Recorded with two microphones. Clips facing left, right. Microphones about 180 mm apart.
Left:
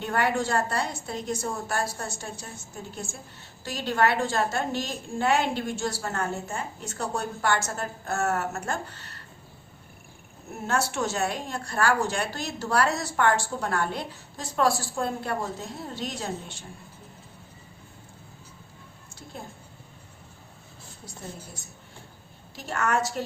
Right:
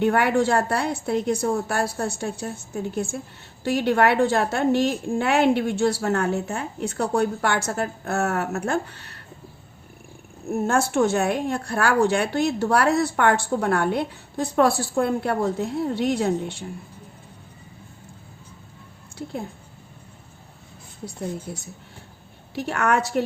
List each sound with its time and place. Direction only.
0.0 s speech: 60° right (ahead or behind)
10.5 s speech: 50° right (ahead or behind)
19.2 s speech: 70° right (ahead or behind)
22.5 s speech: 65° right (ahead or behind)